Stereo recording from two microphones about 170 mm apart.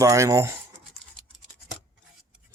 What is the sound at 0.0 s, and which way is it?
Speech, 20° right (ahead or behind).